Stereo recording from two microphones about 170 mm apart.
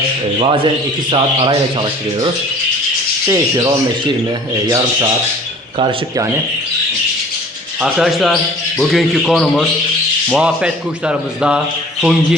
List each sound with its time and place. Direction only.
0.3 s speech: 30° right (ahead or behind)
3.2 s speech: 20° right (ahead or behind)
7.8 s a man's voice: centre (ahead or behind)